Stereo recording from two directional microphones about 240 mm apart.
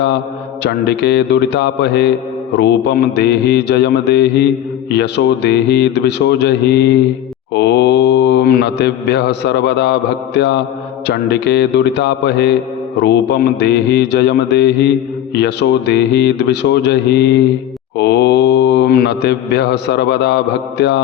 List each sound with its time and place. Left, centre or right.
0.6 s mantra: left